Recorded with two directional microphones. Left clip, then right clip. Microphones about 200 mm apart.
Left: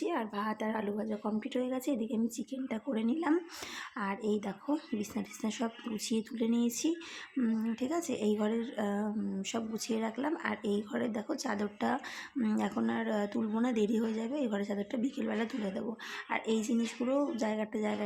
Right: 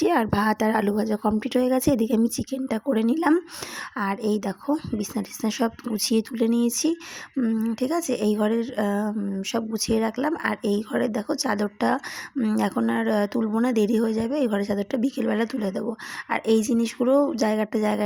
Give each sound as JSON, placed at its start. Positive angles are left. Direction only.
{"t": 0.0, "sound": "speech", "side_deg": -55}